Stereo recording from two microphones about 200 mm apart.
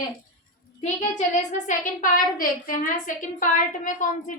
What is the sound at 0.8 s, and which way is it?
A woman's voice, 35° left (ahead or behind).